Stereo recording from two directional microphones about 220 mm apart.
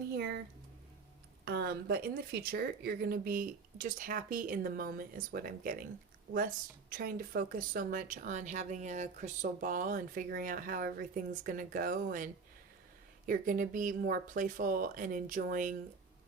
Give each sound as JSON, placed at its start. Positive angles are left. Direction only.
{"t": 0.1, "sound": "a sound", "side_deg": -50}
{"t": 1.5, "sound": "speech", "side_deg": -45}
{"t": 6.9, "sound": "speech", "side_deg": -40}